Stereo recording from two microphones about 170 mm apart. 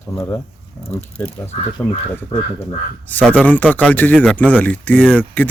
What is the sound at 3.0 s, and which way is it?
Speech, 10° left (ahead or behind).